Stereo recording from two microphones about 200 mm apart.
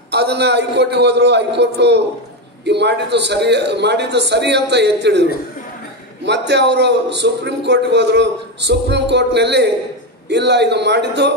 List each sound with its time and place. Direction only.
0.1 s a man's voice: 55° right (ahead or behind)